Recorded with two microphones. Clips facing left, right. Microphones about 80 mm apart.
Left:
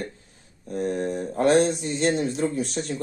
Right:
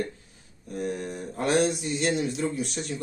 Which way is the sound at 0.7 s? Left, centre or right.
Left.